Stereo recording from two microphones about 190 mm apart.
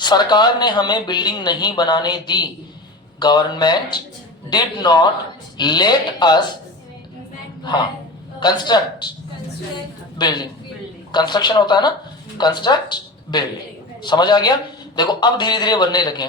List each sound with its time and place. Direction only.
0.0 s speech: 20° left (ahead or behind)
8.4 s speech: 25° left (ahead or behind)
10.2 s a man's voice: 20° left (ahead or behind)